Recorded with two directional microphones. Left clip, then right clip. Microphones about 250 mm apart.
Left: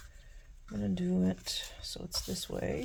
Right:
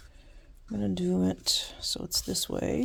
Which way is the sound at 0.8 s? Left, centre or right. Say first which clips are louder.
Right 5 dB; right.